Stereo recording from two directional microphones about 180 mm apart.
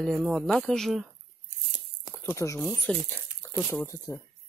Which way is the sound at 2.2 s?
15° left (ahead or behind).